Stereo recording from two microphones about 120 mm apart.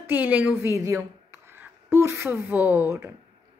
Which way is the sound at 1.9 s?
20° right (ahead or behind).